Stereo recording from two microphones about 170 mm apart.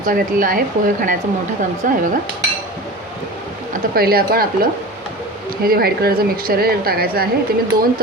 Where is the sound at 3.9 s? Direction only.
65° right (ahead or behind).